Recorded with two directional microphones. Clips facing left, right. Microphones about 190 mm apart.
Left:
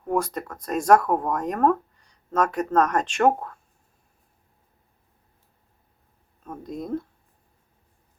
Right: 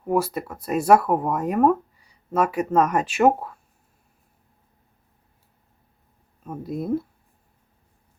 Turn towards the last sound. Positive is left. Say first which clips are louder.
# right 4 dB
turn(degrees=-5)  # may be behind; listen again after turning